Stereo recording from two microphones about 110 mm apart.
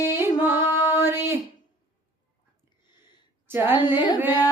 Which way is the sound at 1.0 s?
20° right (ahead or behind).